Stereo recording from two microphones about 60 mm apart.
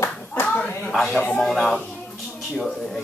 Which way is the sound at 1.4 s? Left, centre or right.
Centre.